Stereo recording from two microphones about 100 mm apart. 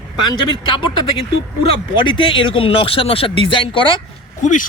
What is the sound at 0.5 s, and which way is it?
Speech, 55° left (ahead or behind).